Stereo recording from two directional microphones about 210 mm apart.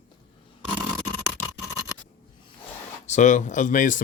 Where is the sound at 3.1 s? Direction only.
35° left (ahead or behind).